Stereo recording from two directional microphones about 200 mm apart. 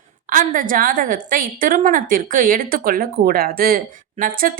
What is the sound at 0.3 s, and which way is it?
A woman's voice, 40° right (ahead or behind).